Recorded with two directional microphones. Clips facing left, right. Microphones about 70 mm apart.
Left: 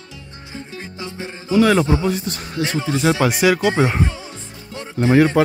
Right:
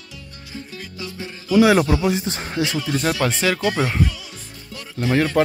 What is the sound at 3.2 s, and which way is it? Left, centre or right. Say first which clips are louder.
A man's voice: left 4 dB; centre.